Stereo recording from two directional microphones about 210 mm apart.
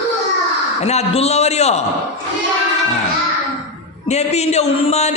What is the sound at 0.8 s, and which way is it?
Speech, 30° left (ahead or behind).